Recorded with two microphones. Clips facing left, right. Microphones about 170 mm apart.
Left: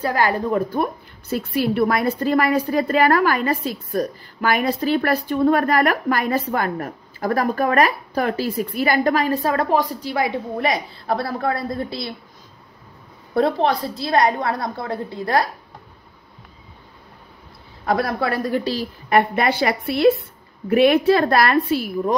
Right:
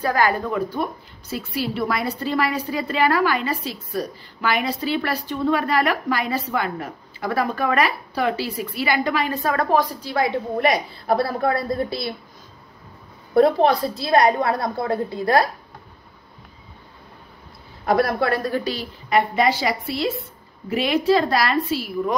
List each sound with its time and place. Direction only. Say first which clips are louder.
0.0 s a woman's voice: even; 30° left (ahead or behind)
0.5 s a woman's voice: left 3 dB; 50° left (ahead or behind)
9.4 s a woman's voice: left 1 dB; 25° left (ahead or behind)
10.6 s a woman's voice: right 3 dB; 5° right (ahead or behind)
13.3 s a woman's voice: right 3 dB; 5° right (ahead or behind)
17.8 s a woman's voice: right 2 dB; 5° right (ahead or behind)
19.0 s a woman's voice: left 1 dB; 55° left (ahead or behind)